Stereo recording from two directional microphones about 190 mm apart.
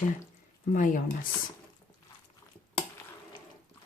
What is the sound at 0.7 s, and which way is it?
Speech, 45° left (ahead or behind).